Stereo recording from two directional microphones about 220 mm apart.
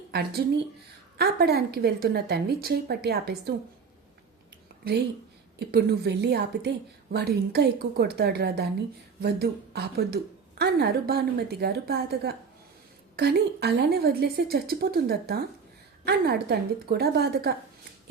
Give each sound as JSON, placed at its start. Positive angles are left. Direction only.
{"t": 0.1, "sound": "a woman's voice", "side_deg": -45}
{"t": 4.8, "sound": "a woman's voice", "side_deg": -45}